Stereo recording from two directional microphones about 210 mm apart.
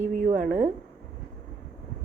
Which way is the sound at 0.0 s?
35° right (ahead or behind).